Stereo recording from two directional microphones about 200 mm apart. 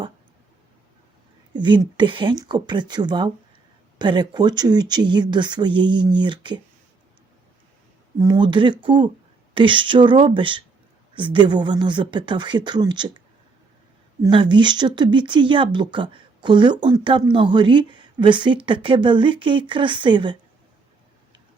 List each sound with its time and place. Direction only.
1.5 s speech: 20° right (ahead or behind)
8.2 s speech: 20° right (ahead or behind)